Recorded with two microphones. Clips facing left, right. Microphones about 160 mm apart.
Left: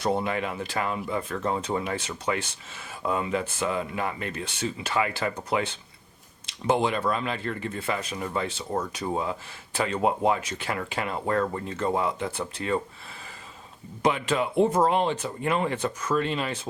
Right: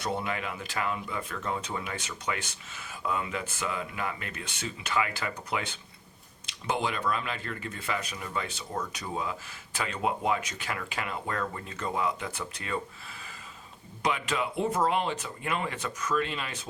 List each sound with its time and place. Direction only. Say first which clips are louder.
0.0 s speech: left 6 dB; 30° left (ahead or behind)
6.7 s speech: left 6 dB; 30° left (ahead or behind)
9.7 s speech: left 6 dB; 30° left (ahead or behind)
14.0 s speech: left 5 dB; 30° left (ahead or behind)